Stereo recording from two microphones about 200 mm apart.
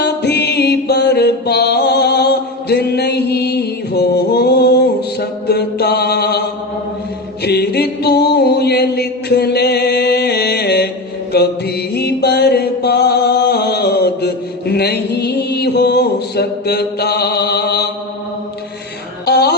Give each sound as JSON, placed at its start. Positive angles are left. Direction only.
{"t": 0.0, "sound": "mantra", "side_deg": 55}
{"t": 7.4, "sound": "music", "side_deg": 55}
{"t": 11.3, "sound": "mantra", "side_deg": 55}
{"t": 19.2, "sound": "a sound", "side_deg": 55}